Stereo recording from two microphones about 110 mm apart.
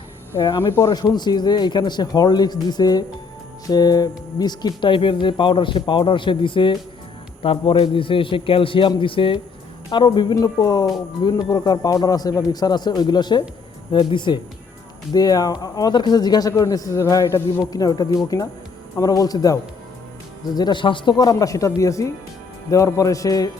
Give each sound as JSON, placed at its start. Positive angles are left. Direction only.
{"t": 0.3, "sound": "speech", "side_deg": 40}
{"t": 9.9, "sound": "speech", "side_deg": 45}